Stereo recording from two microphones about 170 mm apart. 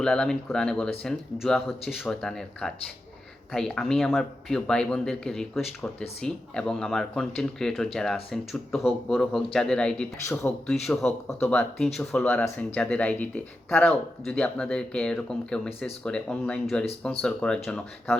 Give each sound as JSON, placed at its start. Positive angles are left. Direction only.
{"t": 0.0, "sound": "speech", "side_deg": 5}
{"t": 10.2, "sound": "speech", "side_deg": 15}